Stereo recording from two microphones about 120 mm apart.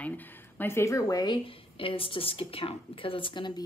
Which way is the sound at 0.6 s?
20° left (ahead or behind).